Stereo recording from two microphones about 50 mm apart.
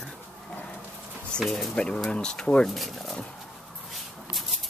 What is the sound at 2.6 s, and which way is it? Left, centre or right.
Speech, centre.